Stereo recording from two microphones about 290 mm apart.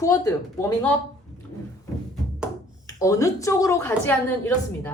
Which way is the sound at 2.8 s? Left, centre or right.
Centre.